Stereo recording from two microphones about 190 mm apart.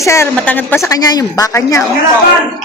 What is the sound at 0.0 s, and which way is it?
A man's voice, 15° left (ahead or behind).